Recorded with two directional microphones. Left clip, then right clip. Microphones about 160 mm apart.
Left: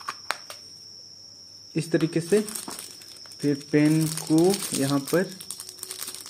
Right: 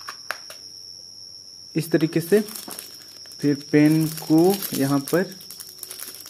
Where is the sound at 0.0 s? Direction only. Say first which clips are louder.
Left 1 dB; 15° left (ahead or behind).